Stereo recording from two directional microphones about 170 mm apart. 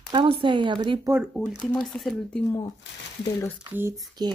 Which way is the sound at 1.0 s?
15° right (ahead or behind).